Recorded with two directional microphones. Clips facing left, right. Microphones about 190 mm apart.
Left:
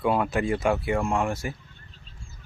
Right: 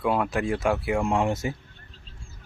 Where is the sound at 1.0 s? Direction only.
20° right (ahead or behind).